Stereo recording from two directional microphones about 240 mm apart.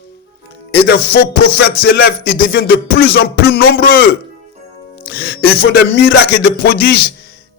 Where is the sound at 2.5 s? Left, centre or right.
Left.